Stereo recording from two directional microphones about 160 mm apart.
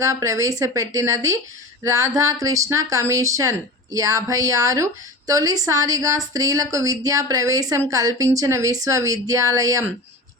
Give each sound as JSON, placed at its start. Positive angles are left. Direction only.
{"t": 0.0, "sound": "speech", "side_deg": -20}